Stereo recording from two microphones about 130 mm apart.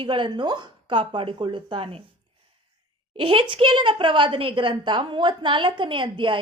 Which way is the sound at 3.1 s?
40° right (ahead or behind).